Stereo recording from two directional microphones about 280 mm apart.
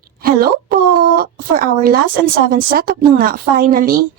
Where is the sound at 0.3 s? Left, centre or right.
Right.